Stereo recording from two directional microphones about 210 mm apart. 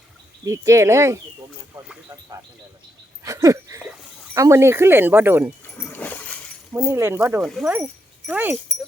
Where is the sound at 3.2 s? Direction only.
15° right (ahead or behind).